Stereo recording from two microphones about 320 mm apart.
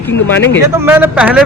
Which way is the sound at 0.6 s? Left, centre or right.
Centre.